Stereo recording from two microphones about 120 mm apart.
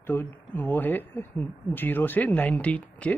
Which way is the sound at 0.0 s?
20° left (ahead or behind).